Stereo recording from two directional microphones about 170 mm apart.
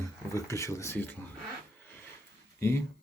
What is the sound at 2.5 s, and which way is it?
Speech, 15° left (ahead or behind).